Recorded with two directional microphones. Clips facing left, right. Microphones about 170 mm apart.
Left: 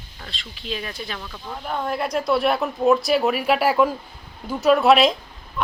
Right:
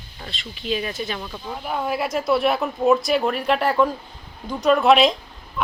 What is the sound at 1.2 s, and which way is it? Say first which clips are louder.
Speech: right 3 dB; 15° right (ahead or behind).